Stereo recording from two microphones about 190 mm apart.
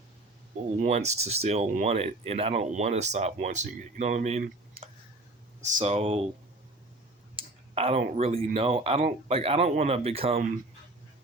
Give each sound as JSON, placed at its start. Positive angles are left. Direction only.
{"t": 0.8, "sound": "speech", "side_deg": -35}
{"t": 7.3, "sound": "speech", "side_deg": -30}